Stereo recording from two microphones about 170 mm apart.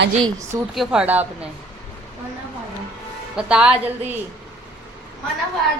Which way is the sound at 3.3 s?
5° right (ahead or behind).